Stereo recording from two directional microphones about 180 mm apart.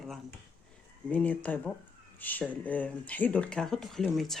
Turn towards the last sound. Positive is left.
turn(degrees=0)  # may be behind; listen again after turning